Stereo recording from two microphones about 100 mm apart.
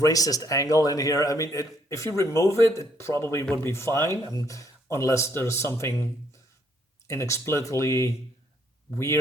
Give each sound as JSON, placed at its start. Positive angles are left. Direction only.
{"t": 0.0, "sound": "a man's voice", "side_deg": 35}